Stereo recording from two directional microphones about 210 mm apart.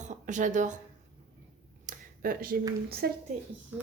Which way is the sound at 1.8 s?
45° right (ahead or behind).